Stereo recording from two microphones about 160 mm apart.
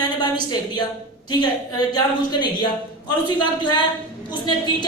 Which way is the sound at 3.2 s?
30° left (ahead or behind).